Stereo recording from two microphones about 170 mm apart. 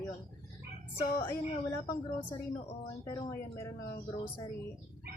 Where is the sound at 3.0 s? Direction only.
15° left (ahead or behind).